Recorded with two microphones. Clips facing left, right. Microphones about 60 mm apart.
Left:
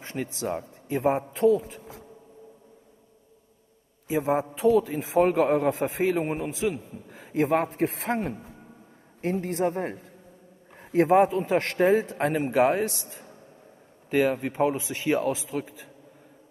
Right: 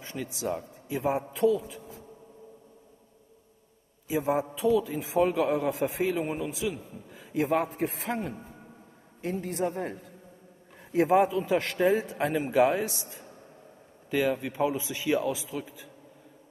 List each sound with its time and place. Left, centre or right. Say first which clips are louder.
0.0 s a man's voice: left 2 dB; left
4.1 s a man's voice: left 2 dB; left
7.9 s a man's voice: left 4 dB; left
9.2 s a man's voice: left 4 dB; left
10.9 s a man's voice: left 3 dB; left
11.1 s a man's voice: left 3 dB; left
12.4 s a man's voice: left 1 dB; left
14.1 s a man's voice: left 3 dB; left